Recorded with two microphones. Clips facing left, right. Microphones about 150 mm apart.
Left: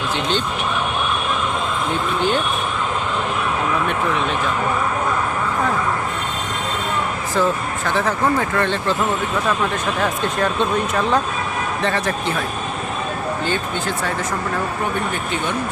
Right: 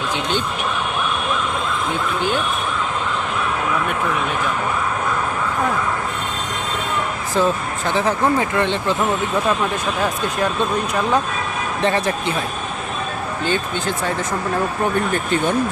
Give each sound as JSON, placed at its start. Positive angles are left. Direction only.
{"t": 7.3, "sound": "speech", "side_deg": -20}
{"t": 10.0, "sound": "speech", "side_deg": -5}
{"t": 11.8, "sound": "speech", "side_deg": -15}
{"t": 13.4, "sound": "speech", "side_deg": -20}